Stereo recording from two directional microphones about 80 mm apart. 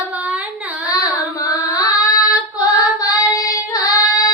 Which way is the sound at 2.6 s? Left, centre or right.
Left.